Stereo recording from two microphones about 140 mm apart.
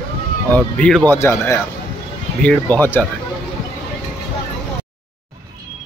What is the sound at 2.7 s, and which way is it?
Speech, 15° left (ahead or behind).